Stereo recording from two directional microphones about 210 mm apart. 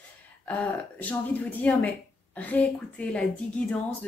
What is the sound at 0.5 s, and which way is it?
Speech, 5° left (ahead or behind).